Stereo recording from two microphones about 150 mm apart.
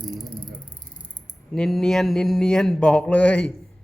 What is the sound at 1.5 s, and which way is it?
A woman's voice, centre (ahead or behind).